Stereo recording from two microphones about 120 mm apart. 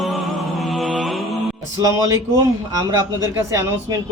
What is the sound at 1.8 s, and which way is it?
A man's voice, 30° right (ahead or behind).